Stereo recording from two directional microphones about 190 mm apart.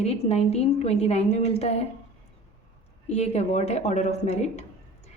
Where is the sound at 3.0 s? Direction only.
35° left (ahead or behind).